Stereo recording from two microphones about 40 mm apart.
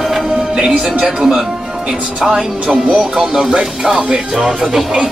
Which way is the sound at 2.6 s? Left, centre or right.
Right.